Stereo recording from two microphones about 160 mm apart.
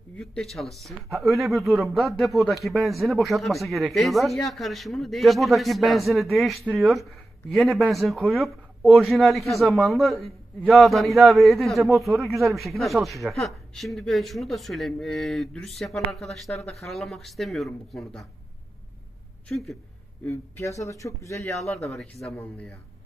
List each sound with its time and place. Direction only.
0.2 s speech: 5° left (ahead or behind)
19.4 s speech: centre (ahead or behind)
20.2 s speech: 15° left (ahead or behind)
21.8 s speech: centre (ahead or behind)